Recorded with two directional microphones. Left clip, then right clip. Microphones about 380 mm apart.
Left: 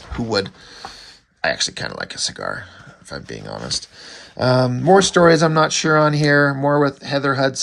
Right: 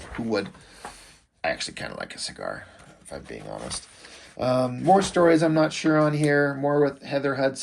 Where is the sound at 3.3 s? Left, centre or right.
Left.